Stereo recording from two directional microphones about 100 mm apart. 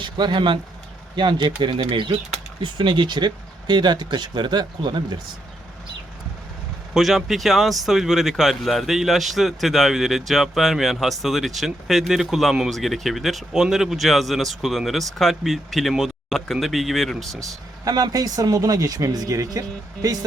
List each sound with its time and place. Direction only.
0.0 s speech: 50° right (ahead or behind)
6.9 s speech: centre (ahead or behind)
17.8 s speech: 40° right (ahead or behind)